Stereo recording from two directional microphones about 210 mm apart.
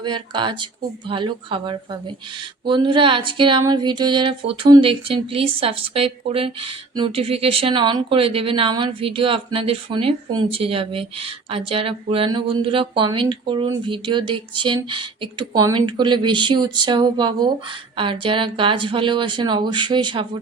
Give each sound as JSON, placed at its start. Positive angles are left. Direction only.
{"t": 0.0, "sound": "speech", "side_deg": -20}